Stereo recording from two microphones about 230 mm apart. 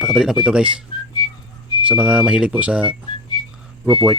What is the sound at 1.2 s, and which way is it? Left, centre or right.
Whistling, centre.